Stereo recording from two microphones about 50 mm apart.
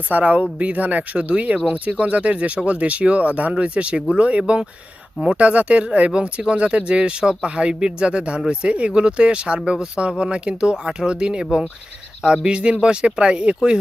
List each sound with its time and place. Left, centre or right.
0.1 s speech: right